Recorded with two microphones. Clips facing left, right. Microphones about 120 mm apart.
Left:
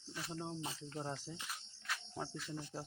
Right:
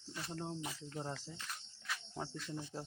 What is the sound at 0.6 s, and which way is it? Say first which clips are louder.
Cricket: even; 25° left (ahead or behind).